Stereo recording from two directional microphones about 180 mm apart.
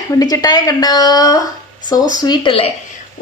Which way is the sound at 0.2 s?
20° left (ahead or behind).